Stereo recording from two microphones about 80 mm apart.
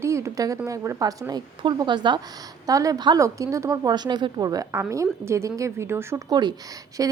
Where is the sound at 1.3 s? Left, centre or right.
Right.